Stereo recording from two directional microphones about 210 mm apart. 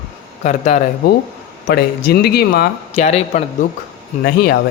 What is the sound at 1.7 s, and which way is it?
Speech, 45° left (ahead or behind).